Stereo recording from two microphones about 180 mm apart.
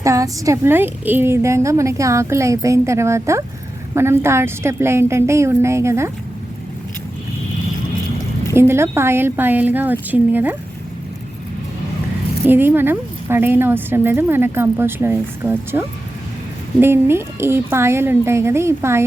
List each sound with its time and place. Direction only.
0.0 s a woman's voice: 15° right (ahead or behind)
8.5 s a woman's voice: 15° right (ahead or behind)
12.5 s a woman's voice: 10° right (ahead or behind)